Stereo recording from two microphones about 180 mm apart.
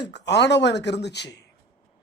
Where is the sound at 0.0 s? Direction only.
75° left (ahead or behind).